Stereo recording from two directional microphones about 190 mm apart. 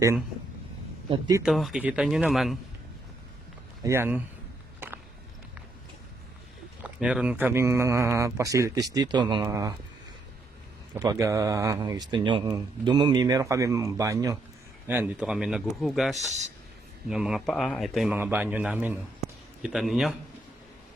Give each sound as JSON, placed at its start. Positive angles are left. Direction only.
{"t": 1.4, "sound": "a man's voice", "side_deg": 0}
{"t": 3.8, "sound": "speech", "side_deg": -10}
{"t": 6.8, "sound": "speech", "side_deg": -5}
{"t": 10.9, "sound": "a man's voice", "side_deg": -20}